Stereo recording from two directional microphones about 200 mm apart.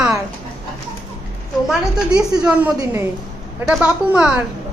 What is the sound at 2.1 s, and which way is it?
A woman's voice, 5° right (ahead or behind).